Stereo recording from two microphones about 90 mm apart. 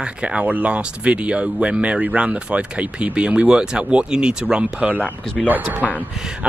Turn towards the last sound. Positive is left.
turn(degrees=-10)  # may be behind; listen again after turning